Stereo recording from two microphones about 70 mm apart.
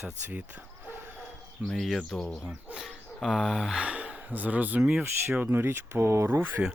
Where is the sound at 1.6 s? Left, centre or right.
Centre.